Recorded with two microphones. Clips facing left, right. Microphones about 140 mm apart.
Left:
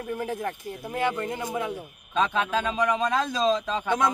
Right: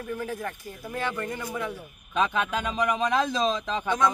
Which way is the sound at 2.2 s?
10° right (ahead or behind).